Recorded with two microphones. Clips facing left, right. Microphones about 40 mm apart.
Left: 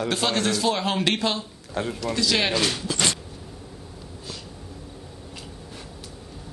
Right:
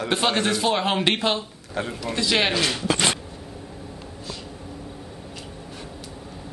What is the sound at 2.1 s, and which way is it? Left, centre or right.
Speech, right.